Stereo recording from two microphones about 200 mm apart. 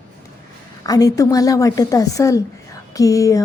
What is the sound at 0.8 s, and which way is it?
A woman's voice, 20° left (ahead or behind).